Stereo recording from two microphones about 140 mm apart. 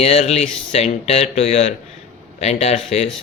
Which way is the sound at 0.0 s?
50° left (ahead or behind).